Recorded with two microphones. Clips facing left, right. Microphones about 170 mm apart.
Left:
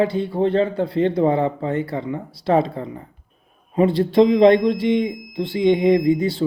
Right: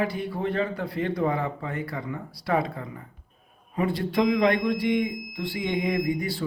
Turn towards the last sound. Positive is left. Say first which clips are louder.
# left 9 dB
turn(degrees=25)  # may be behind; listen again after turning